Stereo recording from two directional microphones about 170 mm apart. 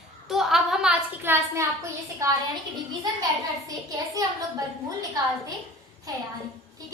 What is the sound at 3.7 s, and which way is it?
Speech, 20° right (ahead or behind).